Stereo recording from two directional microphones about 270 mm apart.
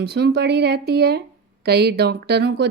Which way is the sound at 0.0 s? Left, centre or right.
Right.